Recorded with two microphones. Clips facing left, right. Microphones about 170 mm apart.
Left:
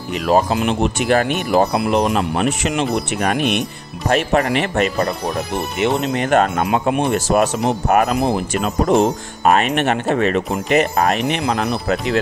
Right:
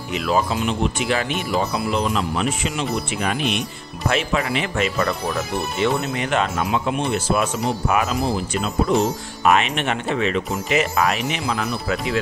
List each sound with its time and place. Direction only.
0.1 s speech: 45° left (ahead or behind)
4.8 s speech: 35° left (ahead or behind)
5.8 s speech: 20° left (ahead or behind)
6.1 s speech: 50° left (ahead or behind)